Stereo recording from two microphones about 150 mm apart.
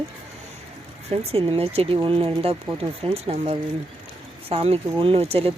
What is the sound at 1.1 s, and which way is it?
Speech, 40° right (ahead or behind).